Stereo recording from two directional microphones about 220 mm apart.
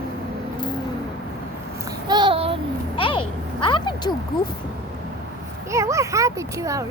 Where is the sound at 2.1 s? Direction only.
20° right (ahead or behind).